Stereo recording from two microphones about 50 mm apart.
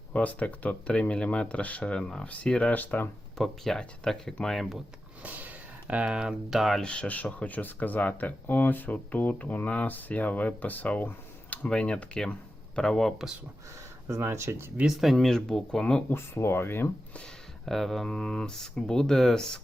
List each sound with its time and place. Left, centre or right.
0.1 s speech: left
2.7 s speech: left
3.3 s speech: centre
5.2 s a sound: right
6.1 s speech: centre
6.5 s speech: centre
6.8 s speech: left
11.5 s speech: left; by 13.2 s centre
14.1 s speech: right
15.1 s speech: centre
16.1 s speech: left
17.7 s speech: centre